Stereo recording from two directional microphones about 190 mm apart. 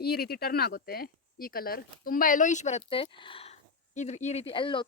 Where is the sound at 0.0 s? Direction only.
55° left (ahead or behind).